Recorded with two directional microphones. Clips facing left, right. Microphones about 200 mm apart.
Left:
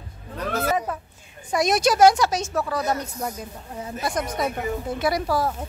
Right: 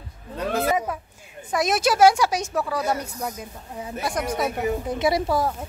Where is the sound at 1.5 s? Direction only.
5° right (ahead or behind); by 5.5 s 20° right (ahead or behind).